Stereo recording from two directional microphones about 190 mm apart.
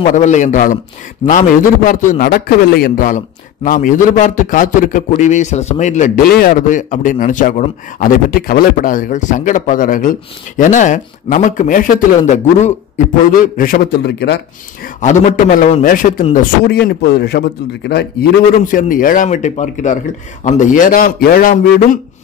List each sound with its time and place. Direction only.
0.0 s speech: 40° left (ahead or behind)
1.9 s a man's voice: 45° left (ahead or behind); by 14.4 s 60° left (ahead or behind)
15.0 s a man's voice: 40° left (ahead or behind)
16.3 s a man's voice: 55° left (ahead or behind)
18.6 s a man's voice: 45° left (ahead or behind)